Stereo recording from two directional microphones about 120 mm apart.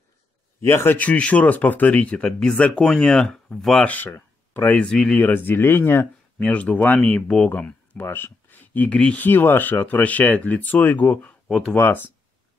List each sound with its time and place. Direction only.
0.6 s speech: 20° left (ahead or behind)
11.4 s speech: centre (ahead or behind)
11.7 s speech: 20° left (ahead or behind)